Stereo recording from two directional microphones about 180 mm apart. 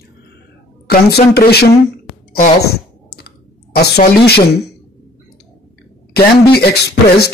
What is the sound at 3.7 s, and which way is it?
Speech, 60° left (ahead or behind).